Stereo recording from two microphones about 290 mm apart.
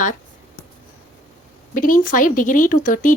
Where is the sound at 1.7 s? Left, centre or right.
Left.